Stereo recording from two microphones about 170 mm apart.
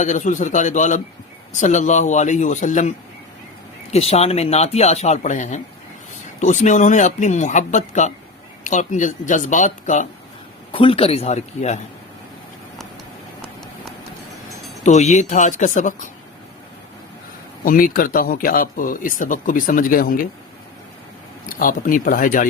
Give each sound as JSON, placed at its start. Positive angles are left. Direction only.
{"t": 0.0, "sound": "speech", "side_deg": 45}
{"t": 3.9, "sound": "speech", "side_deg": 40}
{"t": 10.7, "sound": "speech", "side_deg": 30}
{"t": 14.8, "sound": "speech", "side_deg": 45}
{"t": 17.7, "sound": "speech", "side_deg": 55}
{"t": 21.4, "sound": "speech", "side_deg": 55}